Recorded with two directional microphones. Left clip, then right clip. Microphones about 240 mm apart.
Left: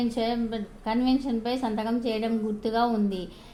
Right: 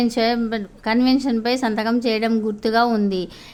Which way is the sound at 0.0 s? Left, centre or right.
Right.